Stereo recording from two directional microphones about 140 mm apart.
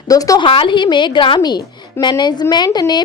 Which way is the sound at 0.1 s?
25° left (ahead or behind).